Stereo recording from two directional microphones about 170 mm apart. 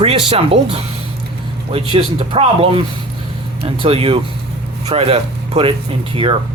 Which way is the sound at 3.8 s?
35° right (ahead or behind).